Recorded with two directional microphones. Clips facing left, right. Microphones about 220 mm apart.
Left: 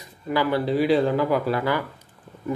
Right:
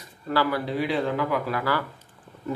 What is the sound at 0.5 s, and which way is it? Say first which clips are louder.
Speech: left 6 dB; 35° left (ahead or behind).